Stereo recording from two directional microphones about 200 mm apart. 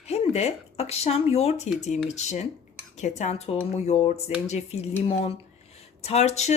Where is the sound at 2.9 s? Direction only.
35° left (ahead or behind).